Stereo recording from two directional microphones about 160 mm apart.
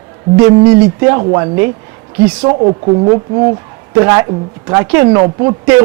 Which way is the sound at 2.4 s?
30° right (ahead or behind).